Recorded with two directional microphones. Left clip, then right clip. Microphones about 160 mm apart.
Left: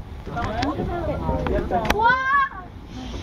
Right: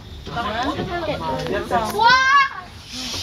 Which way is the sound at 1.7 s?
25° right (ahead or behind).